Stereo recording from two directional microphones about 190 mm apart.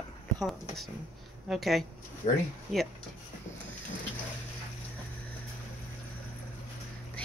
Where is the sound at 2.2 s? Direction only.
30° left (ahead or behind).